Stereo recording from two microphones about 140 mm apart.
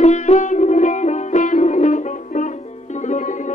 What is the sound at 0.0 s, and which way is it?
Music, 50° left (ahead or behind).